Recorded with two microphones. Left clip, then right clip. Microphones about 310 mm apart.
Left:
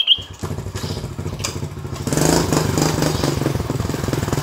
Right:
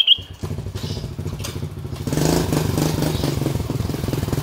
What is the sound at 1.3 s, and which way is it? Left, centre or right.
Vehicle, left.